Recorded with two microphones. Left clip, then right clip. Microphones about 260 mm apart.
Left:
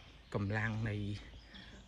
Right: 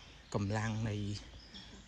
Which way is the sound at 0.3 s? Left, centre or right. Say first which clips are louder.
Even; centre.